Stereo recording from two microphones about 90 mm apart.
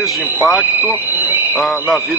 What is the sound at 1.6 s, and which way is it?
Speech, centre (ahead or behind).